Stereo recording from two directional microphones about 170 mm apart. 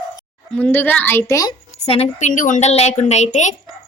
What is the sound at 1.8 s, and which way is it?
Speech, 35° left (ahead or behind).